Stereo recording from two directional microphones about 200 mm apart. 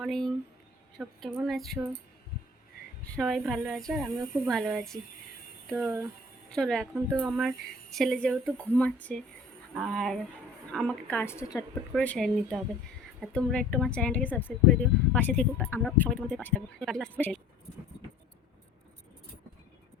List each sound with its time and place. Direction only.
0.0 s a woman's voice: centre (ahead or behind)
3.1 s a woman's voice: centre (ahead or behind)
11.9 s a woman's voice: 5° left (ahead or behind)